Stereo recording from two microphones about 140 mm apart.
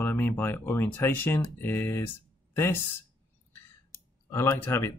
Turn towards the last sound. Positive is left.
turn(degrees=15)  # may be behind; listen again after turning